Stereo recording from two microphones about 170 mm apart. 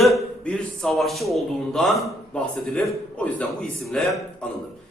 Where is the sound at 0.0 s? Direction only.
5° left (ahead or behind).